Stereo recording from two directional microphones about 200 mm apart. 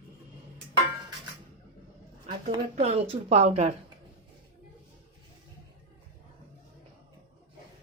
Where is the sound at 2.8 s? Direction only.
30° right (ahead or behind).